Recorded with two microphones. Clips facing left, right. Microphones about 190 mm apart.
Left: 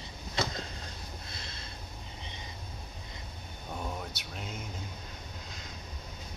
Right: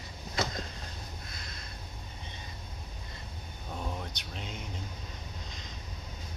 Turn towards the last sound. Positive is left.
turn(degrees=5)  # may be behind; listen again after turning